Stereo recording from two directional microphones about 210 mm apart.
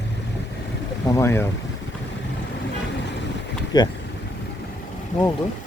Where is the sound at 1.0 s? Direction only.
15° left (ahead or behind).